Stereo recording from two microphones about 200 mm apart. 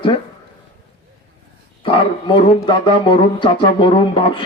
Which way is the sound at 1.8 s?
25° left (ahead or behind).